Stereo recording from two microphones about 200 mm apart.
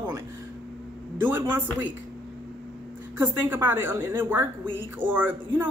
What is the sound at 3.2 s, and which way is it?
A woman's voice, 10° right (ahead or behind).